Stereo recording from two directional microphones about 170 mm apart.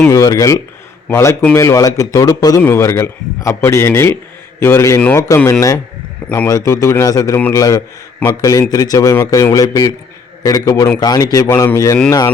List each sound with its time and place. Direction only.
0.1 s a man's voice: 20° left (ahead or behind)